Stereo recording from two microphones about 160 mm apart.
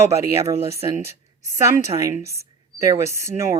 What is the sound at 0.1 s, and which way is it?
A woman's voice, 20° right (ahead or behind).